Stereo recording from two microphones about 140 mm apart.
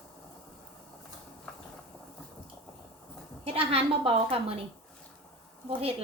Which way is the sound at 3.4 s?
45° right (ahead or behind).